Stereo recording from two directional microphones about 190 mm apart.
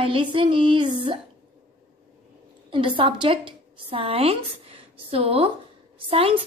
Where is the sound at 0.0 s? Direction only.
25° right (ahead or behind).